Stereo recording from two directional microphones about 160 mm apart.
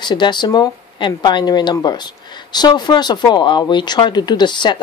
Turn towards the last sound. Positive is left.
turn(degrees=30)  # may be behind; listen again after turning